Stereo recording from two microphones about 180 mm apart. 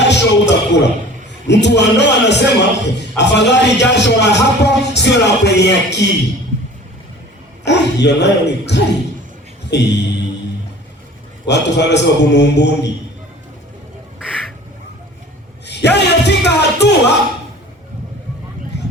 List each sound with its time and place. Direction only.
0.0 s music: 75° left (ahead or behind)
1.5 s a man's voice: 70° left (ahead or behind)
7.6 s a man's voice: 70° left (ahead or behind)
11.4 s a man's voice: 70° left (ahead or behind)
15.6 s a man's voice: 70° left (ahead or behind)